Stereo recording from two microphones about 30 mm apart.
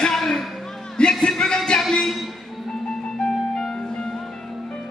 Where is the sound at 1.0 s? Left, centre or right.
Left.